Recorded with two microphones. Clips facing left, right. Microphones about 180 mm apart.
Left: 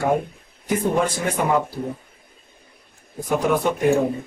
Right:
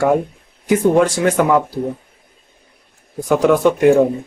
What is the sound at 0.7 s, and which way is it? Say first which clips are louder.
Speech: right 8 dB; 85° right.